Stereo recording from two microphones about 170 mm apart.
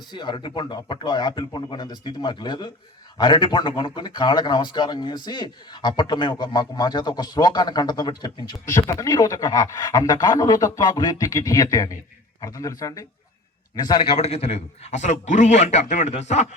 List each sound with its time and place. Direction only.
0.1 s a man's voice: 25° left (ahead or behind); by 16.5 s 40° left (ahead or behind)